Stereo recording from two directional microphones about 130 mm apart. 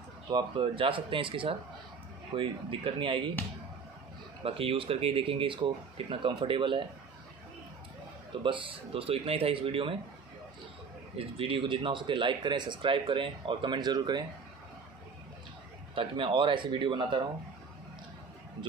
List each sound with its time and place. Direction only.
0.3 s speech: 40° right (ahead or behind)
4.4 s speech: 45° right (ahead or behind)
8.3 s speech: 40° right (ahead or behind)
11.1 s speech: 45° right (ahead or behind)
15.9 s speech: 45° right (ahead or behind)